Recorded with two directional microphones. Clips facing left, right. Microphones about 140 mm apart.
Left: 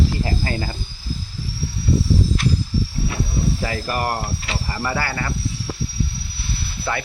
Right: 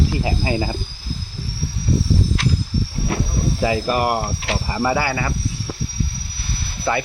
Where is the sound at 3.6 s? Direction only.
20° right (ahead or behind).